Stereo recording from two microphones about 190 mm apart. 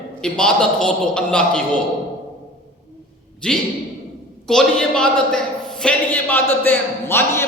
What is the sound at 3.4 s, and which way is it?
A man's voice, 5° left (ahead or behind).